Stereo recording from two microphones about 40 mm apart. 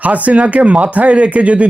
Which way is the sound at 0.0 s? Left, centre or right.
Right.